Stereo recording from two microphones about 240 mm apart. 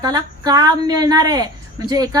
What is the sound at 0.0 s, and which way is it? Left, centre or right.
Speech, centre.